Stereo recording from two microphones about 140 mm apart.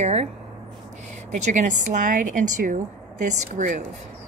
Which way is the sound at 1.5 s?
65° right (ahead or behind).